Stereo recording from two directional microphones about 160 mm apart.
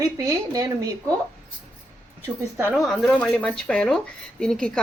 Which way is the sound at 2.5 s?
10° right (ahead or behind).